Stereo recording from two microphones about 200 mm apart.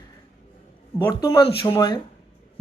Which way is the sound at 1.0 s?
15° left (ahead or behind).